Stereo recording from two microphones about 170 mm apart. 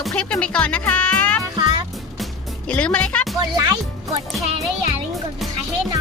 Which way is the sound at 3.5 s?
20° right (ahead or behind).